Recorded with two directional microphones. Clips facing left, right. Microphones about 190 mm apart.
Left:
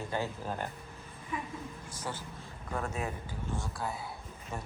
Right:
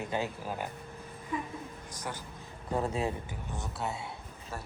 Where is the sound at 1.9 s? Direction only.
15° right (ahead or behind).